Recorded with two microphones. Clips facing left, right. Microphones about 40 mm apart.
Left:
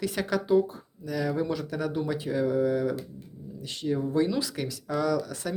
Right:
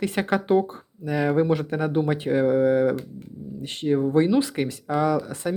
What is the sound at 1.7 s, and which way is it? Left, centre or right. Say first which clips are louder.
Speech: right 6 dB; right.